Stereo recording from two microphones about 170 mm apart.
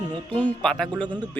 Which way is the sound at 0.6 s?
5° left (ahead or behind).